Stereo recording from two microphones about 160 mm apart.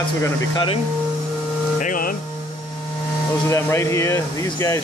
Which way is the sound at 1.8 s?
55° left (ahead or behind).